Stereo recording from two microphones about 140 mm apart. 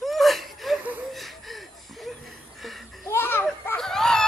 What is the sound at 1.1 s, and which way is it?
Chuckle, centre (ahead or behind).